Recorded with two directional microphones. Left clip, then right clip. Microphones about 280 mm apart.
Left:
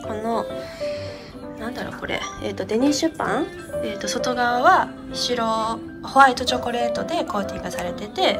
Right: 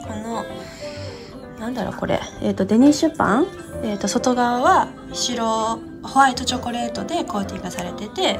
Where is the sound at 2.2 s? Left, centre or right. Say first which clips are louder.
Right 4 dB; left.